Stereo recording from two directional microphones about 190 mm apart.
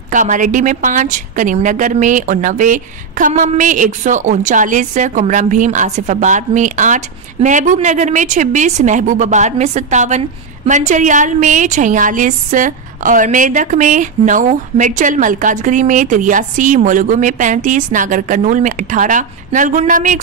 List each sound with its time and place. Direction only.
0.1 s a woman's voice: 45° right (ahead or behind)